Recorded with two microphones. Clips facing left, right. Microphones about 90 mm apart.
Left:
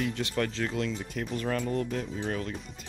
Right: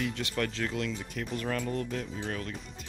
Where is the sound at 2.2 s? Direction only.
15° left (ahead or behind).